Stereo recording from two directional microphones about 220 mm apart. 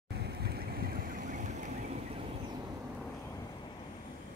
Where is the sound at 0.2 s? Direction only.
45° right (ahead or behind).